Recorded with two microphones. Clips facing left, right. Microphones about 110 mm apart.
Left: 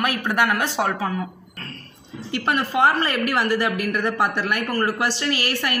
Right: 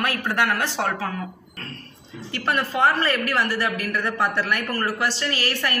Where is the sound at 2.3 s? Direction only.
15° left (ahead or behind).